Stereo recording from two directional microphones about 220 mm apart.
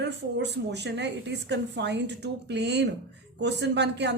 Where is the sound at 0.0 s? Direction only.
50° right (ahead or behind).